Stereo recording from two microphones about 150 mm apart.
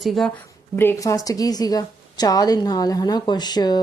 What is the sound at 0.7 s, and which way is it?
A woman's voice, 15° left (ahead or behind).